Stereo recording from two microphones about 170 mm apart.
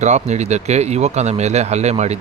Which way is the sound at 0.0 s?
45° right (ahead or behind).